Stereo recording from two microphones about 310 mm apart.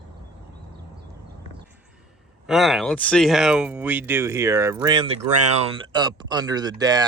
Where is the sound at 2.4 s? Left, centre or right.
Centre.